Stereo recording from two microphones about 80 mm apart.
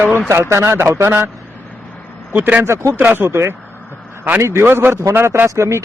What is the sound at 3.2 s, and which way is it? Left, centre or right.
A man's voice, right.